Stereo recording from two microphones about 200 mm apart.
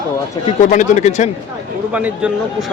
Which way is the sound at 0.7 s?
40° left (ahead or behind).